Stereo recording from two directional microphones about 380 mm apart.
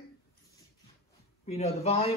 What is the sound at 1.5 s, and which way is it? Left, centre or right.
Speech, centre.